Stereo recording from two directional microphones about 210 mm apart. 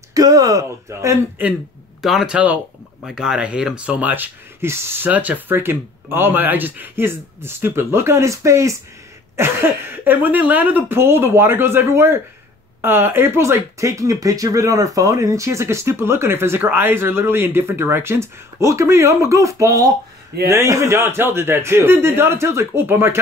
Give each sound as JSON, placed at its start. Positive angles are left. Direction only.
{"t": 0.1, "sound": "speech", "side_deg": -15}
{"t": 2.0, "sound": "speech", "side_deg": 0}